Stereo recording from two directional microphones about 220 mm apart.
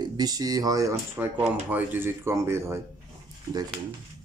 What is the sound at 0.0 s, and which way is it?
Speech, 15° right (ahead or behind).